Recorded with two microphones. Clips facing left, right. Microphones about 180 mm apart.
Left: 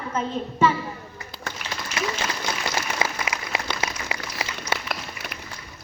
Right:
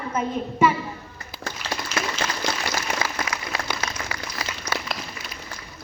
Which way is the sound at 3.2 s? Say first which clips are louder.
Even; 20° left (ahead or behind).